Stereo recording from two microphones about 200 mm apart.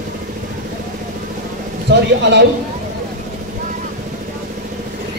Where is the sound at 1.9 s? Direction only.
60° right (ahead or behind).